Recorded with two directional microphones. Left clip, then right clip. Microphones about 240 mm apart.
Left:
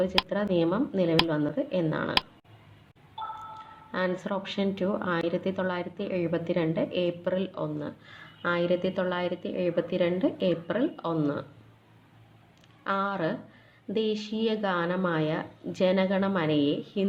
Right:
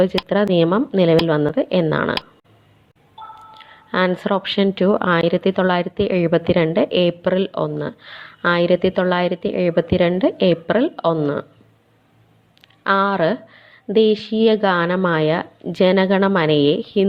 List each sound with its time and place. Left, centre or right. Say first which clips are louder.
0.1 s a woman's voice: right 9 dB; right
3.2 s a sound: even; centre
3.9 s a woman's voice: right 11 dB; right
12.8 s a woman's voice: right 12 dB; right